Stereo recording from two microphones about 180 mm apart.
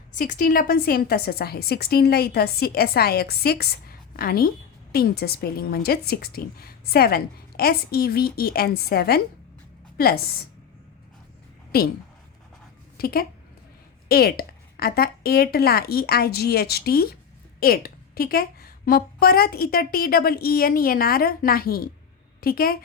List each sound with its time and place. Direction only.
0.2 s a woman's voice: 50° left (ahead or behind)
11.7 s a woman's voice: 55° left (ahead or behind)
13.0 s a woman's voice: 55° left (ahead or behind)